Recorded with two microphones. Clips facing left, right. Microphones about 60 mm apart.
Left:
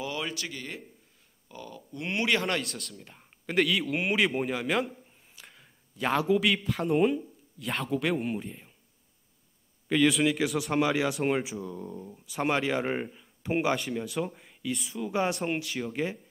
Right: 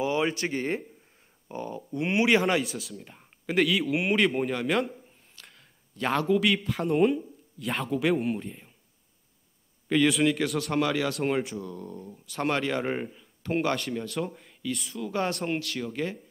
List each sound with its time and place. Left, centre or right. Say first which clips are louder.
0.0 s speech: right 8 dB; right
2.4 s a man's voice: right 5 dB; centre
9.8 s speech: right 1 dB; centre